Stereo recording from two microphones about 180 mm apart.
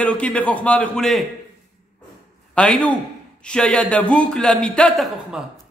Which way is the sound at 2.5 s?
5° left (ahead or behind).